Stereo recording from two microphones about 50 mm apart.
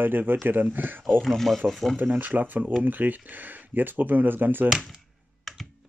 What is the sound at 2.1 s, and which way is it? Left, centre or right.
Speech, right.